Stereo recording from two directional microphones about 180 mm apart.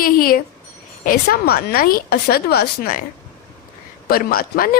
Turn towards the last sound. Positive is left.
turn(degrees=55)  # may be behind; listen again after turning